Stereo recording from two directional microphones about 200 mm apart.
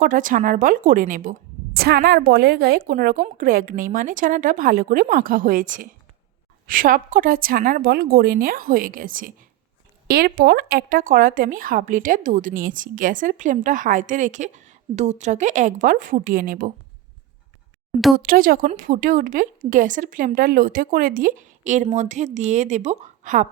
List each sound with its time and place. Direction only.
0.0 s a woman's voice: 40° right (ahead or behind)
18.2 s speech: 45° right (ahead or behind)